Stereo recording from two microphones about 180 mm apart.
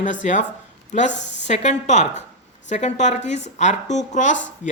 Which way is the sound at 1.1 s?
75° left (ahead or behind).